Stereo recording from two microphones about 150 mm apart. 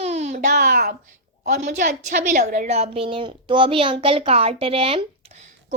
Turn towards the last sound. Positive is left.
turn(degrees=-40)  # may be behind; listen again after turning